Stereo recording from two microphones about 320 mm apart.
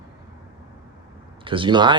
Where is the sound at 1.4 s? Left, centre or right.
Centre.